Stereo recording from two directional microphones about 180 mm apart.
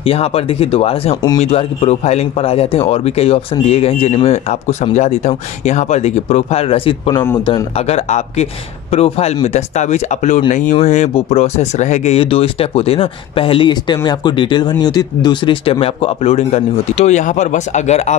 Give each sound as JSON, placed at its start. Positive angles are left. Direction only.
{"t": 0.0, "sound": "speech", "side_deg": 35}